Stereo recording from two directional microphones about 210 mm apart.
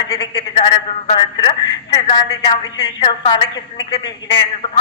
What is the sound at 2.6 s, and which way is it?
A man's voice, 20° left (ahead or behind).